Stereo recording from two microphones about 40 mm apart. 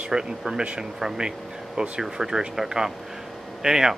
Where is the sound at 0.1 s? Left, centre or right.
Centre.